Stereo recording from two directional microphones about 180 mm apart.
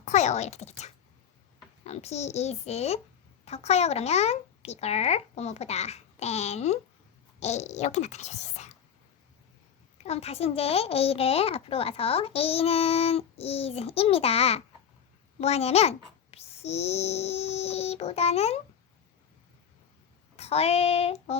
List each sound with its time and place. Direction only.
0.0 s a child's voice: 40° left (ahead or behind)
1.8 s a child's voice: 35° left (ahead or behind)
10.0 s a child's voice: 35° left (ahead or behind)
20.3 s child singing: 35° left (ahead or behind)